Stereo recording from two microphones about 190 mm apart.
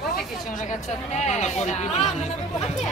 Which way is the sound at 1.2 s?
40° left (ahead or behind).